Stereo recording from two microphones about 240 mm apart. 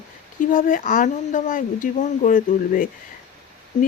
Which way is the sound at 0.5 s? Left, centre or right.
Left.